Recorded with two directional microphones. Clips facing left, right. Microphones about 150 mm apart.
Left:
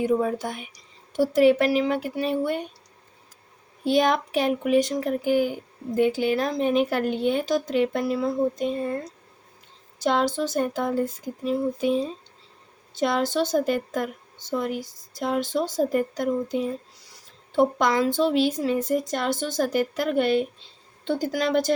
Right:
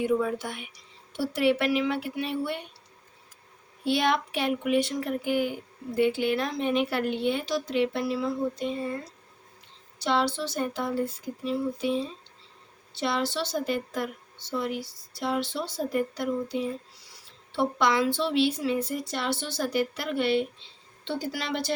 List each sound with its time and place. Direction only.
0.0 s speech: 40° left (ahead or behind)
3.8 s a woman's voice: 40° left (ahead or behind)
10.0 s a woman's voice: 45° left (ahead or behind)